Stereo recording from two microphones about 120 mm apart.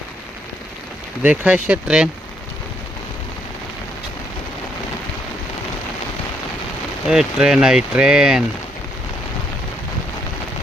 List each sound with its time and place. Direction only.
1.2 s speech: 15° right (ahead or behind)
7.1 s speech: 5° right (ahead or behind)